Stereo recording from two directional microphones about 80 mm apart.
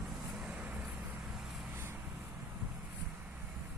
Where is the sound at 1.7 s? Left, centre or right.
Right.